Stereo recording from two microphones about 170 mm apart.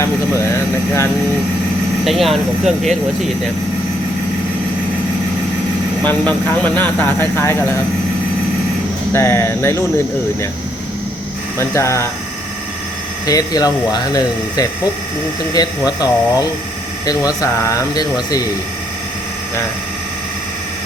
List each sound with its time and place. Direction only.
0.0 s a sound: 15° left (ahead or behind)
2.0 s speech: centre (ahead or behind)
6.1 s speech: 10° left (ahead or behind)
9.1 s speech: 15° left (ahead or behind)
11.5 s speech: 15° left (ahead or behind)
13.2 s speech: 20° left (ahead or behind)